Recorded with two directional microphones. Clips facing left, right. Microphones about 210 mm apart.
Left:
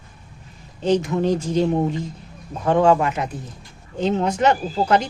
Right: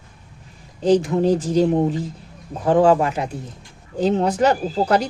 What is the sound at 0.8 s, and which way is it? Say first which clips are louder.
Speech: right 3 dB; 35° right (ahead or behind).